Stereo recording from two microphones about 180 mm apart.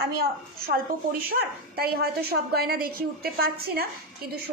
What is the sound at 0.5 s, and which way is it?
A woman's voice, 55° right (ahead or behind).